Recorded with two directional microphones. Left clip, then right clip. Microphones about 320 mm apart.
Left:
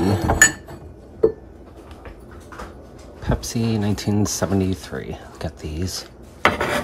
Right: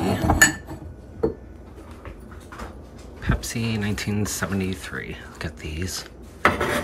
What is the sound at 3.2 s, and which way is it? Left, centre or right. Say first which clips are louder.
Speech: left 3 dB; centre.